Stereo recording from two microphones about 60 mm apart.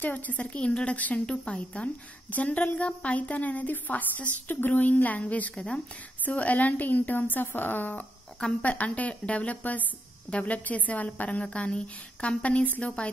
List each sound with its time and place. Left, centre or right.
0.0 s a woman's voice: left